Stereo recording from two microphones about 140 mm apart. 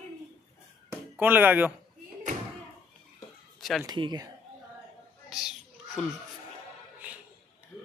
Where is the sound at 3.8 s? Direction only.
30° right (ahead or behind).